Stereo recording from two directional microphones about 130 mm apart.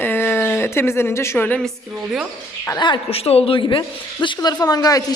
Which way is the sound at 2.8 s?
40° left (ahead or behind).